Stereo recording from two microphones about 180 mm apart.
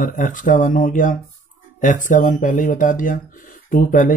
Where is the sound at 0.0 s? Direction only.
50° left (ahead or behind).